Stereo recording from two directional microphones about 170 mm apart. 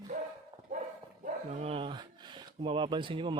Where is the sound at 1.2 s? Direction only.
35° right (ahead or behind).